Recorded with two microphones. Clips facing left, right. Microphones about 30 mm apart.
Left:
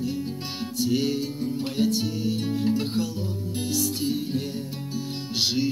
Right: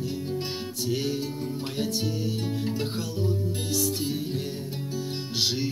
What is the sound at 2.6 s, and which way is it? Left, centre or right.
Music, centre.